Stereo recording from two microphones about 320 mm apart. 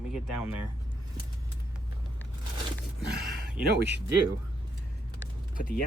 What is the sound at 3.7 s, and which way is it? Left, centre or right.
Speech, right.